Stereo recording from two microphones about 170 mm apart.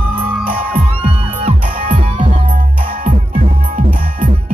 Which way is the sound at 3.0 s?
50° right (ahead or behind).